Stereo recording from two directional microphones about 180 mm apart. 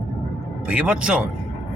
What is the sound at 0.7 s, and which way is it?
Speech, 5° right (ahead or behind).